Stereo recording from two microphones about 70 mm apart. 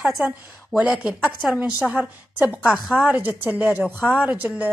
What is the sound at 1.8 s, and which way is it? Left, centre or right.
Speech, right.